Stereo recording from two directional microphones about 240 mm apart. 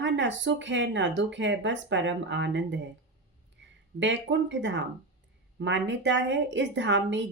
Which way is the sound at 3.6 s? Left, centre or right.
Right.